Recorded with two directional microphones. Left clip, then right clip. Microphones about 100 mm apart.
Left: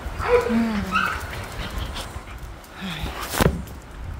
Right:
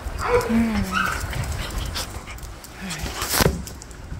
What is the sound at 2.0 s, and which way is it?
Quack, 80° right.